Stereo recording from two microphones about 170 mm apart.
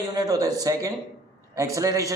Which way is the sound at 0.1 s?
20° right (ahead or behind).